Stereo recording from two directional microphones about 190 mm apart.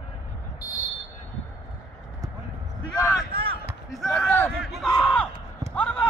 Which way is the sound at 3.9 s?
Centre (ahead or behind).